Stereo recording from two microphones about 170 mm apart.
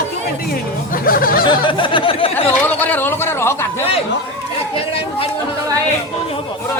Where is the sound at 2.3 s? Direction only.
10° left (ahead or behind).